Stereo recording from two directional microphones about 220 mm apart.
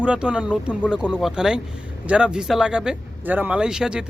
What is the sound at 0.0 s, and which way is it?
Speech, 5° right (ahead or behind).